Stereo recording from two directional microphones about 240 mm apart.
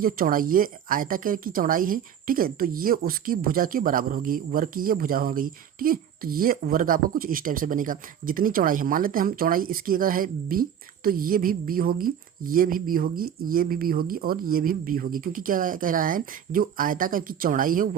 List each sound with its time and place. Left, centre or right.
0.0 s speech: right